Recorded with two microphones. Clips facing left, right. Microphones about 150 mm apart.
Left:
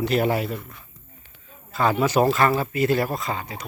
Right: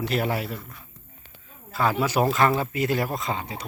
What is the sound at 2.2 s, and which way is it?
Speech, 25° left (ahead or behind).